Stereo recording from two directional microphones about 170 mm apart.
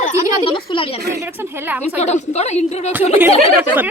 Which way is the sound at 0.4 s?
30° left (ahead or behind).